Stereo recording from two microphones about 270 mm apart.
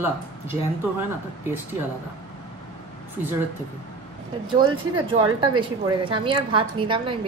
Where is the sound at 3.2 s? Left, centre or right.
Centre.